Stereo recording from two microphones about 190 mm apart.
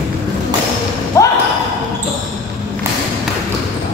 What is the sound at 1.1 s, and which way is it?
Basketball bounce, 15° left (ahead or behind).